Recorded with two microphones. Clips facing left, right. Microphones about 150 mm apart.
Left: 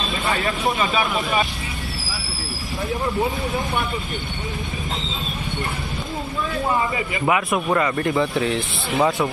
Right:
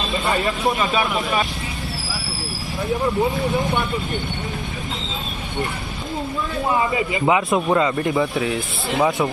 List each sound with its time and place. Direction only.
0.1 s speech: centre (ahead or behind)
3.1 s speech: centre (ahead or behind)
7.1 s speech: 20° right (ahead or behind)
8.1 s speech: centre (ahead or behind)